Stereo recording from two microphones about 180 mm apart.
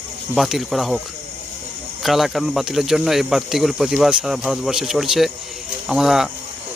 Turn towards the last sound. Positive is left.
turn(degrees=0)  # may be behind; listen again after turning